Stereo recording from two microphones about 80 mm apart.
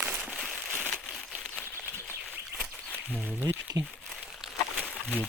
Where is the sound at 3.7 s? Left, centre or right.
Right.